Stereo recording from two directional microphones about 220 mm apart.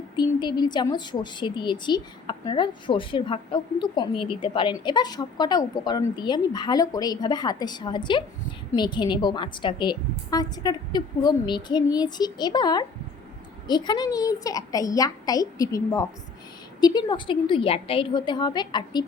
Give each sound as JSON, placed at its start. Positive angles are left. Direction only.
{"t": 0.2, "sound": "a woman's voice", "side_deg": 20}